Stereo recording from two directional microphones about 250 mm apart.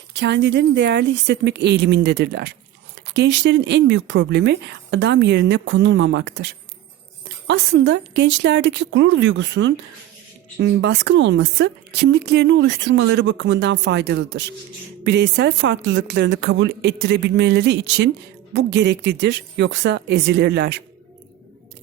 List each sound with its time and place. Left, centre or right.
0.1 s a woman's voice: right